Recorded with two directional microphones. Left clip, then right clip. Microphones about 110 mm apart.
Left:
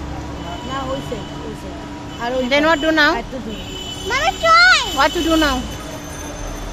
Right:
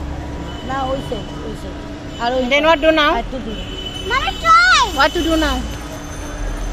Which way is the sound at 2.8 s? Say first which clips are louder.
Right 1 dB; 25° left (ahead or behind).